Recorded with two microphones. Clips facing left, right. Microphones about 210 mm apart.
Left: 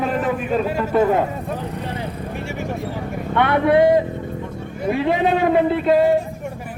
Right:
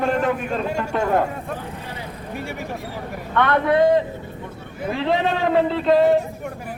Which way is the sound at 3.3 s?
15° left (ahead or behind).